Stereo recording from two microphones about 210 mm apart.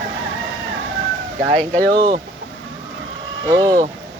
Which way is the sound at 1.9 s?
25° right (ahead or behind).